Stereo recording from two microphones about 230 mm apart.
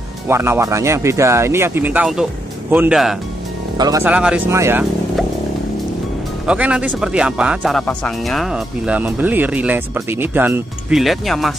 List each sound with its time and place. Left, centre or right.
0.3 s speech: centre
3.7 s speech: centre
6.4 s speech: centre